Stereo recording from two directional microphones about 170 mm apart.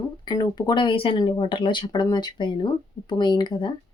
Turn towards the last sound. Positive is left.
turn(degrees=25)  # may be behind; listen again after turning